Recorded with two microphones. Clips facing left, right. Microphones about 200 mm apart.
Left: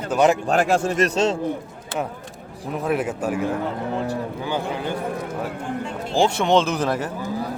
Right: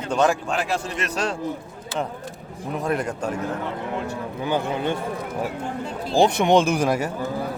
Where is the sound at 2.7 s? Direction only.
5° left (ahead or behind).